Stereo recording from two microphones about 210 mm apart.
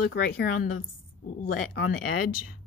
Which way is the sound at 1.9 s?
40° left (ahead or behind).